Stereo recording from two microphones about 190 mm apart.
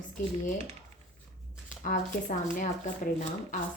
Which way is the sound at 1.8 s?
45° left (ahead or behind).